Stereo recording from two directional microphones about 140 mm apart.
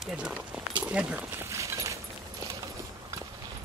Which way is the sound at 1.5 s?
20° right (ahead or behind).